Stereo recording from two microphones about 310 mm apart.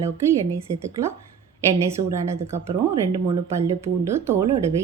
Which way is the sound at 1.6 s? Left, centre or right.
Centre.